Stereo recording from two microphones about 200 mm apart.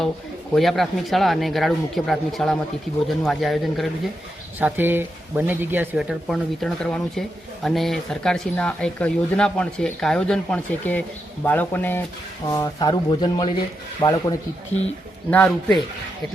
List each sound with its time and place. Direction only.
0.5 s speech: centre (ahead or behind)
4.6 s speech: 10° right (ahead or behind); by 14.3 s 20° left (ahead or behind)
15.3 s speech: 5° left (ahead or behind)